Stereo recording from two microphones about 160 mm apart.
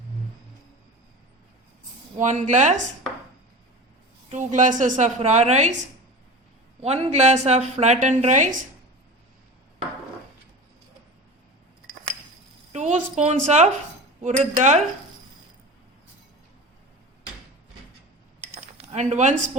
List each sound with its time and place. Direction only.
2.1 s a woman's voice: 50° right (ahead or behind)
4.3 s a woman's voice: 55° right (ahead or behind)
6.8 s a woman's voice: 40° right (ahead or behind)
12.7 s a woman's voice: 50° right (ahead or behind)
18.3 s cutlery: 45° right (ahead or behind)